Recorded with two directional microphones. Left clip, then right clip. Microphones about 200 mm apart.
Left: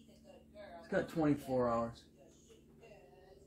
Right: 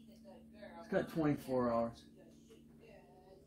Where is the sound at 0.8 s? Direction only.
20° left (ahead or behind).